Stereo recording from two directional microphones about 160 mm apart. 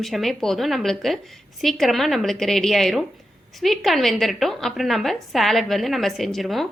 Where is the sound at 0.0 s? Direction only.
Centre (ahead or behind).